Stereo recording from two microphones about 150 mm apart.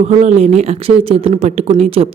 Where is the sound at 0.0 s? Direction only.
50° right (ahead or behind).